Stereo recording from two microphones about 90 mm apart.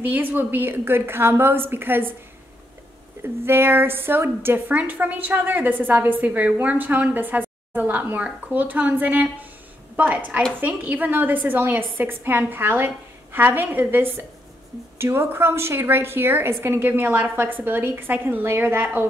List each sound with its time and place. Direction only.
0.0 s a woman's voice: 20° right (ahead or behind)
3.2 s a woman's voice: 25° right (ahead or behind)